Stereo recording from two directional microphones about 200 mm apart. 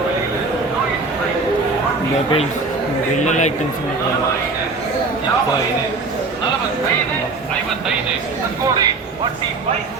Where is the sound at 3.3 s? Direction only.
35° left (ahead or behind).